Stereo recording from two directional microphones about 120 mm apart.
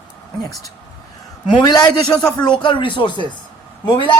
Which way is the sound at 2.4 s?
40° left (ahead or behind).